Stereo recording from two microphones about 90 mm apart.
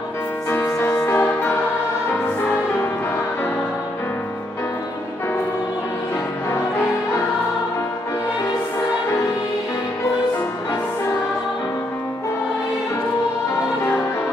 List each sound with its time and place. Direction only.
0.7 s music: 35° left (ahead or behind)